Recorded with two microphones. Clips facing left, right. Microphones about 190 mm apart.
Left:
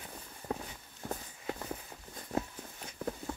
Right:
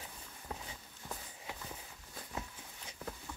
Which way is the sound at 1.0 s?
55° left (ahead or behind).